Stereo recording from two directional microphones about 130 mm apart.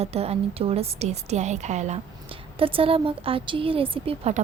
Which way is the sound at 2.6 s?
45° right (ahead or behind).